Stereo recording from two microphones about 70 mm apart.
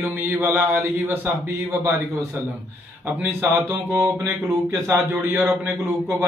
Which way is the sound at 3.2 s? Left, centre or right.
Right.